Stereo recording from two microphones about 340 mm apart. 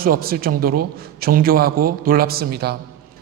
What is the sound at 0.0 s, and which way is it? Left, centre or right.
A man's voice, right.